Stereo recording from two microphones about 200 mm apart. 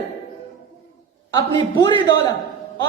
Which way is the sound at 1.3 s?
20° left (ahead or behind).